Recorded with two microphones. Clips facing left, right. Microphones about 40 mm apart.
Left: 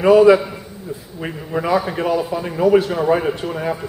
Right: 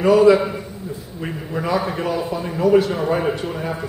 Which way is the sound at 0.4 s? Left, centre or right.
Centre.